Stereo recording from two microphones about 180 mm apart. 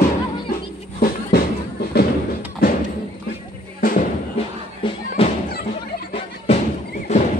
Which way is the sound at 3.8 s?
50° left (ahead or behind).